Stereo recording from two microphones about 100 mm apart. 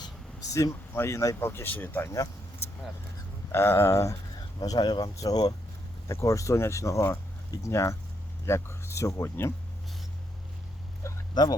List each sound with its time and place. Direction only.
0.0 s speech: 35° left (ahead or behind); by 2.1 s 20° left (ahead or behind)
3.5 s speech: 25° left (ahead or behind)
4.6 s speech: 40° left (ahead or behind)
11.0 s a sound: 30° left (ahead or behind)